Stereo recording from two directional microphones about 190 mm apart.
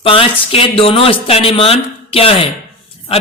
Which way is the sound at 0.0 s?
30° left (ahead or behind).